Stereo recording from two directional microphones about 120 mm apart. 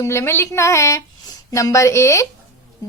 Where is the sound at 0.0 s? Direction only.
20° left (ahead or behind).